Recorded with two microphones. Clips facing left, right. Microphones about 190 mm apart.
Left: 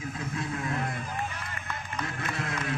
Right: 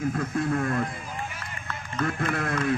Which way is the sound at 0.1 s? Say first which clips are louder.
Right 8 dB; 55° right (ahead or behind).